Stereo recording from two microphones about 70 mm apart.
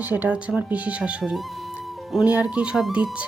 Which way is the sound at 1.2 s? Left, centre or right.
Centre.